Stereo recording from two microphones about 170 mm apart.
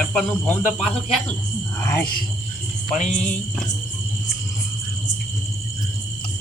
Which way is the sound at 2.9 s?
45° left (ahead or behind).